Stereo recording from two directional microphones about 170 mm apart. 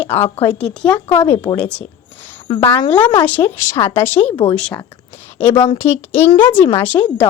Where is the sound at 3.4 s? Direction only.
20° left (ahead or behind).